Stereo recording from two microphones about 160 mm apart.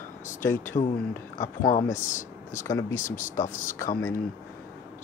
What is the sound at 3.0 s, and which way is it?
Speech, 55° left (ahead or behind).